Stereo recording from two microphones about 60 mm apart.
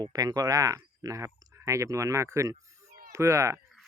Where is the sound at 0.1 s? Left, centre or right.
Right.